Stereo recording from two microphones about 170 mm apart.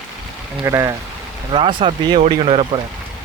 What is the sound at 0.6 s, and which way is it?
Speech, 20° right (ahead or behind).